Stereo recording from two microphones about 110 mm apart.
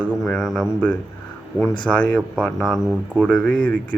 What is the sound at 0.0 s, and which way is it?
Speech, centre (ahead or behind).